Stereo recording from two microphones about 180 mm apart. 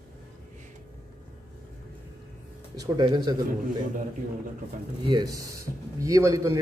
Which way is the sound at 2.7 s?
25° right (ahead or behind).